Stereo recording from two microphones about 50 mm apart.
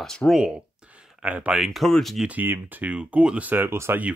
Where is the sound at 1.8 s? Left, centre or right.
Centre.